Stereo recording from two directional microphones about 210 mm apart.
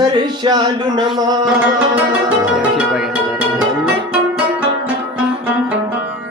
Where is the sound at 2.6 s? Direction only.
5° right (ahead or behind).